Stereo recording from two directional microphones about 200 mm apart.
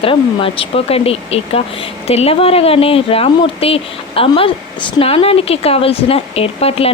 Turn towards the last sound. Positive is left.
turn(degrees=30)  # may be behind; listen again after turning